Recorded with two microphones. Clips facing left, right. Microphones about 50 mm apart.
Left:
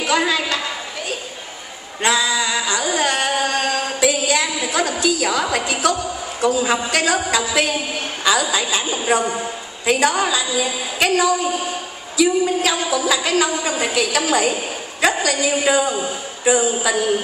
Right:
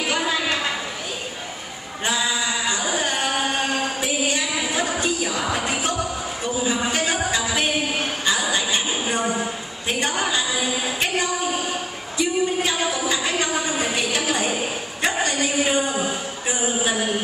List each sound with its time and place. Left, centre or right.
0.1 s a sound: left
2.0 s music: left
5.0 s a woman's voice: left
15.2 s a woman's voice: left